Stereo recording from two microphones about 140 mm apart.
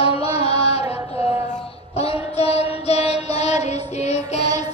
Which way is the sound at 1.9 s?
45° left (ahead or behind).